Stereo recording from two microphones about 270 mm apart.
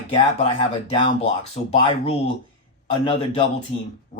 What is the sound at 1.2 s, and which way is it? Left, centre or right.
Speech, left.